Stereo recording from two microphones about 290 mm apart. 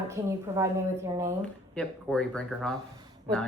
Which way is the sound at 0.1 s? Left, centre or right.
Centre.